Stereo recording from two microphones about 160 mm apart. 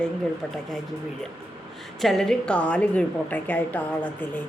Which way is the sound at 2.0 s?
Centre (ahead or behind).